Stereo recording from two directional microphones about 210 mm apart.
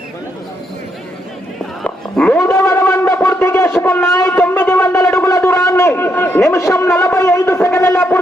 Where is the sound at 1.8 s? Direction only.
5° left (ahead or behind).